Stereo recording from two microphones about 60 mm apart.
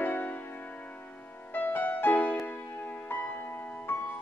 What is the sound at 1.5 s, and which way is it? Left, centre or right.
Music, left.